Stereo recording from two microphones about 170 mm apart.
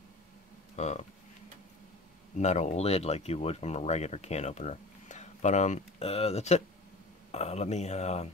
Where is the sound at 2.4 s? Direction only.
40° left (ahead or behind).